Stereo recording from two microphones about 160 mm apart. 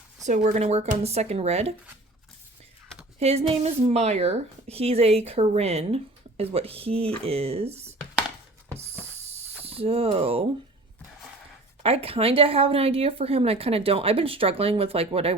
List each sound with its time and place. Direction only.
0.3 s speech: 45° right (ahead or behind)
3.2 s speech: 40° right (ahead or behind)
9.1 s snake: 40° right (ahead or behind)
11.8 s speech: 35° right (ahead or behind)